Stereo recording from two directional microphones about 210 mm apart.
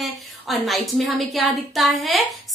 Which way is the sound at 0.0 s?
Centre (ahead or behind).